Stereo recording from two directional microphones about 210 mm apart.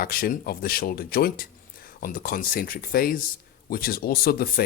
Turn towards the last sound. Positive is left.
turn(degrees=45)  # may be behind; listen again after turning